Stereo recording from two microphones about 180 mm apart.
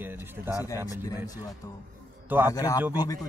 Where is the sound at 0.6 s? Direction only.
20° left (ahead or behind).